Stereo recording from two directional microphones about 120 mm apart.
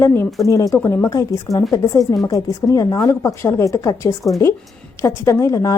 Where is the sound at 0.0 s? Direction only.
20° left (ahead or behind).